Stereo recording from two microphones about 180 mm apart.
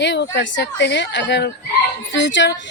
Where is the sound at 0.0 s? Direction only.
75° left (ahead or behind).